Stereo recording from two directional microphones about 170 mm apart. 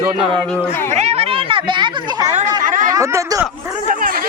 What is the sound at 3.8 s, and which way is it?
Speech, 55° right (ahead or behind).